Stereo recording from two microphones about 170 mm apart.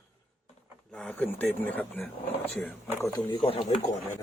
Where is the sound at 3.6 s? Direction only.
45° left (ahead or behind).